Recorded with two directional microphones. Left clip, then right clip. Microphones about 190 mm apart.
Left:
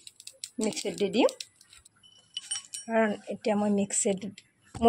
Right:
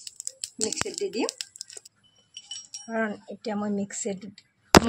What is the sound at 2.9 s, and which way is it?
Speech, 20° left (ahead or behind).